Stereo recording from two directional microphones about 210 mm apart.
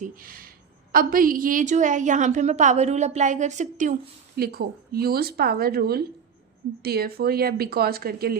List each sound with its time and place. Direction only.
0.0 s a sound: 45° right (ahead or behind)
0.9 s a woman's voice: 40° right (ahead or behind)
4.4 s speech: 45° right (ahead or behind)